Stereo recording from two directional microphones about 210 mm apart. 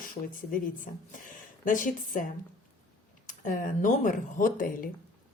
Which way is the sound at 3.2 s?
40° left (ahead or behind).